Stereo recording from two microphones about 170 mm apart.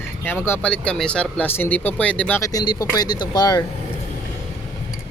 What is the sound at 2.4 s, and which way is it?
Speech, 25° left (ahead or behind).